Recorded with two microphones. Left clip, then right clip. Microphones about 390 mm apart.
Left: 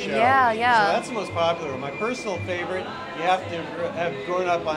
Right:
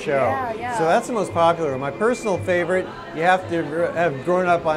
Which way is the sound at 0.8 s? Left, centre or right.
Right.